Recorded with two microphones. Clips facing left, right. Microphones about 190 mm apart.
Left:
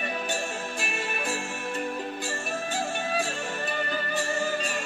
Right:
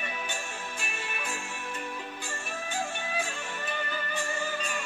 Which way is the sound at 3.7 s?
40° left (ahead or behind).